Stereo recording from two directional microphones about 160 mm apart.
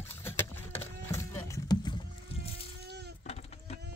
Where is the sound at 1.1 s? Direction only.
15° left (ahead or behind).